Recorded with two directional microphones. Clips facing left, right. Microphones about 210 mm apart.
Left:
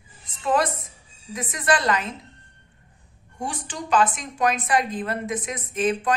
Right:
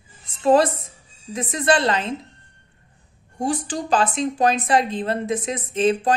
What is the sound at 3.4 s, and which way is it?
Speech, 35° right (ahead or behind).